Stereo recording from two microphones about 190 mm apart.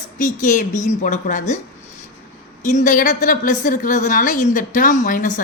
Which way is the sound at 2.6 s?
40° left (ahead or behind).